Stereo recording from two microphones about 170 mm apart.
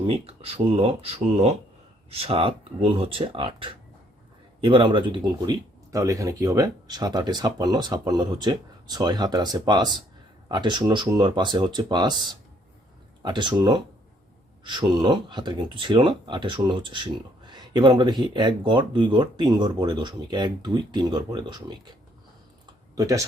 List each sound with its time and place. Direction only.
0.0 s speech: 35° right (ahead or behind)
22.6 s computer keyboard: 20° right (ahead or behind)